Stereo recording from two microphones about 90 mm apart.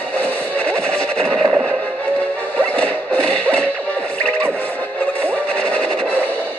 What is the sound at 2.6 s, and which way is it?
Music, 15° left (ahead or behind).